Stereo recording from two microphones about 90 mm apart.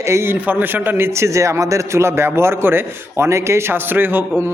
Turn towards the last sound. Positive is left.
turn(degrees=-20)  # may be behind; listen again after turning